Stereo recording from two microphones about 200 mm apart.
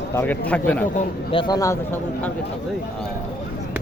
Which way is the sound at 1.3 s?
20° left (ahead or behind).